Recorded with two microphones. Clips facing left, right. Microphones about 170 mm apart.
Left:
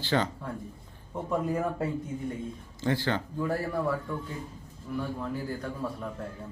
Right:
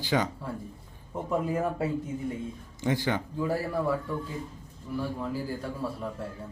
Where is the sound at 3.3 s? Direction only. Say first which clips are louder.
Right 1 dB; 5° right (ahead or behind).